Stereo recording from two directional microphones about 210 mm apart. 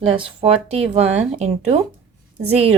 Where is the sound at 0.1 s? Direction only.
25° right (ahead or behind).